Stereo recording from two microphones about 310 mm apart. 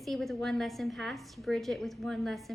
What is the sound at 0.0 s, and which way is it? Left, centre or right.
A woman's voice, centre.